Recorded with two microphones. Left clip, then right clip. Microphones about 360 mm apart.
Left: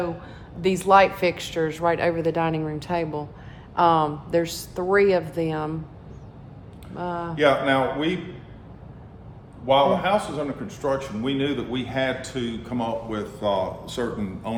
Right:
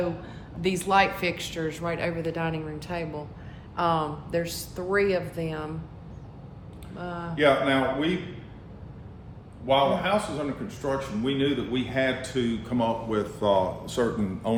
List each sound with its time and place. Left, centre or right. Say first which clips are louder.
0.6 s speech: left 6 dB; centre
6.9 s speech: left 5 dB; left
9.6 s speech: left 4 dB; left; by 14.5 s centre